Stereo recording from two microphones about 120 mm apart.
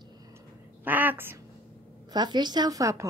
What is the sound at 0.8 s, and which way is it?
Speech, 15° right (ahead or behind).